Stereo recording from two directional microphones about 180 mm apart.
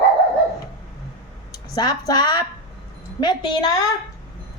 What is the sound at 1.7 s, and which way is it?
Speech, 20° left (ahead or behind).